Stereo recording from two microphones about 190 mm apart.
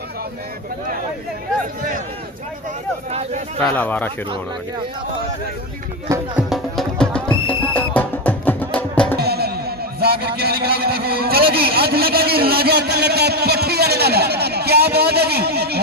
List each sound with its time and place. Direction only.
3.1 s speech: 35° right (ahead or behind)
3.6 s speech: 10° left (ahead or behind)
6.1 s speech: 15° right (ahead or behind)
6.5 s music: 5° left (ahead or behind)
9.1 s a man's voice: 55° right (ahead or behind)